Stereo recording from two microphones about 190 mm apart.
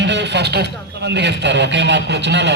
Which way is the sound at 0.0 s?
65° right (ahead or behind).